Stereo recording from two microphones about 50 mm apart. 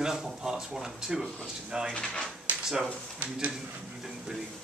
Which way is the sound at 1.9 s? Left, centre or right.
Left.